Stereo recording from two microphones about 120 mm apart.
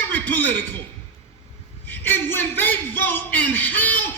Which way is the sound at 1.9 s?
15° left (ahead or behind).